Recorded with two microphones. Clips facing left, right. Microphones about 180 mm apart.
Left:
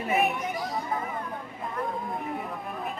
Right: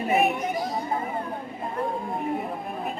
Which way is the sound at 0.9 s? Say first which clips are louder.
Right 3 dB; 30° right (ahead or behind).